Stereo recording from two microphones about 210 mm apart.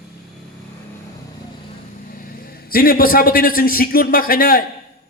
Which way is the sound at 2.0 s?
40° left (ahead or behind).